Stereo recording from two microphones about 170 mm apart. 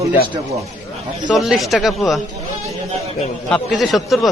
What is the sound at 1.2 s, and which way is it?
Speech, centre (ahead or behind).